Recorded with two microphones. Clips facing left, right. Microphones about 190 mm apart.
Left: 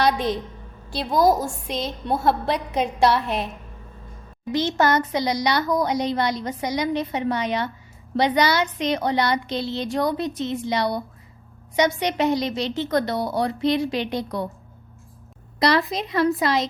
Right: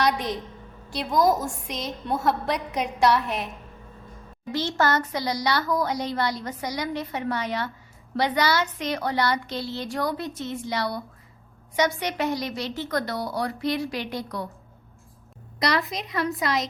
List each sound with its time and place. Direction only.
0.9 s a woman's voice: 30° left (ahead or behind)
4.8 s a woman's voice: 15° left (ahead or behind)
15.5 s a woman's voice: 30° left (ahead or behind)